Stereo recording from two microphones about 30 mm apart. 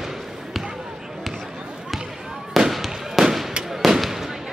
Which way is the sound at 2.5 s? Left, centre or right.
Centre.